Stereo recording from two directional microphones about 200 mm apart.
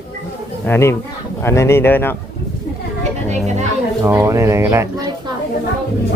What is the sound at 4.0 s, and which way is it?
Speech, 10° right (ahead or behind).